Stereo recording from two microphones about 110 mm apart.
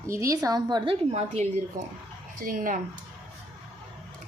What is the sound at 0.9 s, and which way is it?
Speech, 80° right.